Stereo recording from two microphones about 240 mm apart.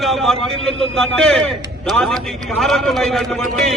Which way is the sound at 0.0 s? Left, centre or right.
Centre.